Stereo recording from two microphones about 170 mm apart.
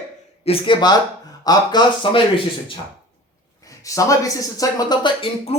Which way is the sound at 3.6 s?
20° left (ahead or behind).